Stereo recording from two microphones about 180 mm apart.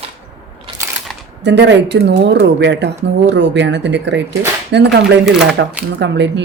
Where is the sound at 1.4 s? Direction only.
75° right (ahead or behind).